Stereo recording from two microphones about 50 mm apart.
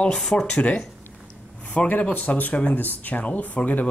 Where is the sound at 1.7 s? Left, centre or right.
Left.